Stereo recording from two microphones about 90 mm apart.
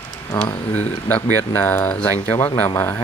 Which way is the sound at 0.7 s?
15° left (ahead or behind).